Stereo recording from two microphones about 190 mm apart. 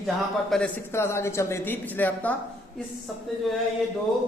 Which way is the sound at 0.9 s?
15° left (ahead or behind).